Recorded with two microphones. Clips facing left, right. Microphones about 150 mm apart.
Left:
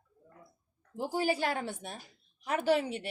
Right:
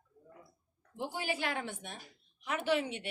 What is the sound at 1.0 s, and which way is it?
Speech, 40° left (ahead or behind).